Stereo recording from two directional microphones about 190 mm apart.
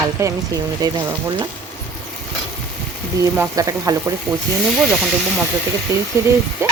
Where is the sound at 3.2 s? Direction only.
15° right (ahead or behind).